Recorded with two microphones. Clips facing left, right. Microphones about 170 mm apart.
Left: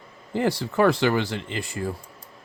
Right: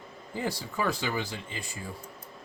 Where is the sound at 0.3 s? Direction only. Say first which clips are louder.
Left 10 dB; 75° left (ahead or behind).